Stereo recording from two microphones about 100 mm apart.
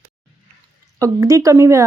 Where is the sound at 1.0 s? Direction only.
30° right (ahead or behind).